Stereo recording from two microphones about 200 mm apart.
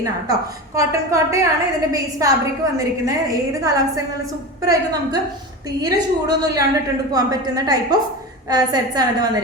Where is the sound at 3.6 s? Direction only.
15° right (ahead or behind).